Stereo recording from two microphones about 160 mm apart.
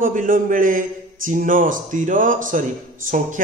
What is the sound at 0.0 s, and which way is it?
A man's voice, 55° right (ahead or behind).